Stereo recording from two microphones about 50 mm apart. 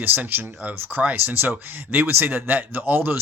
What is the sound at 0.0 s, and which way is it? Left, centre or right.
Speech, right.